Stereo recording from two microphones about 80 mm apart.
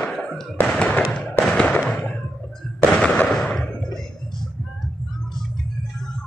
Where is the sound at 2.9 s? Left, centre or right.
Centre.